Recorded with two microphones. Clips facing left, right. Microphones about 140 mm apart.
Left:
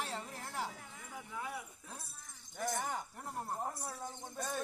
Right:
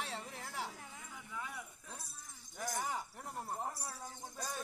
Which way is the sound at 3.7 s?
25° left (ahead or behind).